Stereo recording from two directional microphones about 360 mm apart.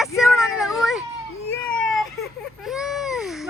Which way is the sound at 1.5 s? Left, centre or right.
Centre.